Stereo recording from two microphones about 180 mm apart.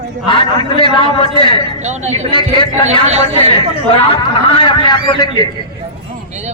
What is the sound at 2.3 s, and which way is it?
Speech, 25° left (ahead or behind).